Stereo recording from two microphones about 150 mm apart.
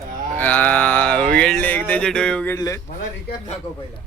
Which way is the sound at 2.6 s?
20° left (ahead or behind).